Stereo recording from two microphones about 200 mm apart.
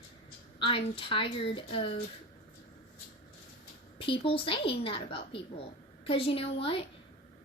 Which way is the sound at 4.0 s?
25° left (ahead or behind).